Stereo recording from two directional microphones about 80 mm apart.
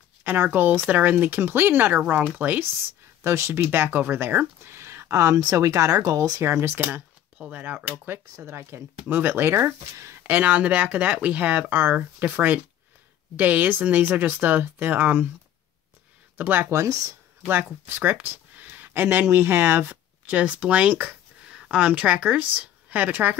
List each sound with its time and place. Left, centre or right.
0.2 s speech: right
6.4 s speech: right
7.3 s speech: centre; by 10.1 s right
10.2 s speech: centre
16.3 s speech: right
16.7 s speech: right
17.5 s speech: right